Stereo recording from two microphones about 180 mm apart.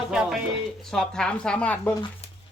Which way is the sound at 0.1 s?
5° right (ahead or behind).